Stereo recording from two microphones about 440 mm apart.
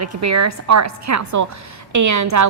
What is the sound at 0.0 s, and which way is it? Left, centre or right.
A woman's voice, right.